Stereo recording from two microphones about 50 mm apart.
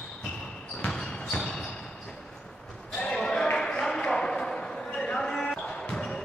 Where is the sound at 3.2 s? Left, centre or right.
Centre.